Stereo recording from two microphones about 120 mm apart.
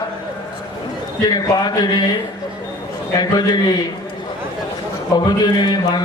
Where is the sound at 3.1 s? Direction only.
35° left (ahead or behind).